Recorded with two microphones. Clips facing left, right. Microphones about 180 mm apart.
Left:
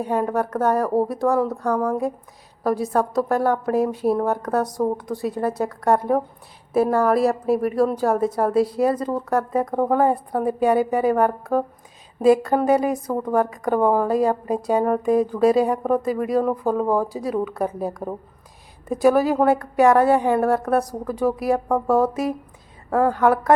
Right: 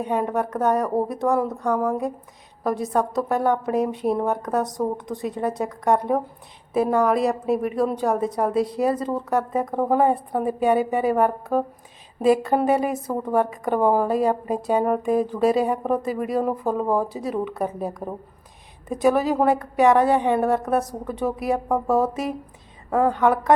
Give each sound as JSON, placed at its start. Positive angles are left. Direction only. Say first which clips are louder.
{"t": 0.0, "sound": "a woman's voice", "louder": "left 1 dB", "side_deg": 0}
{"t": 23.1, "sound": "a woman's voice", "louder": "left 2 dB", "side_deg": 0}